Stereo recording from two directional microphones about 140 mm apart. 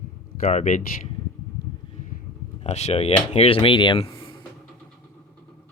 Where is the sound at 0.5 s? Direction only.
60° left (ahead or behind).